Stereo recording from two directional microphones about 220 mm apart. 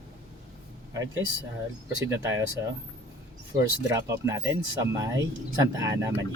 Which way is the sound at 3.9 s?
15° right (ahead or behind).